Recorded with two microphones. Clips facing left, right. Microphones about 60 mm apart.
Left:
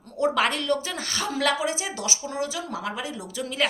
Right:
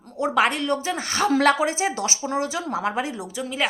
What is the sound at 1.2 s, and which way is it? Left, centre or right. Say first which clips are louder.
Speech: right 6 dB; right.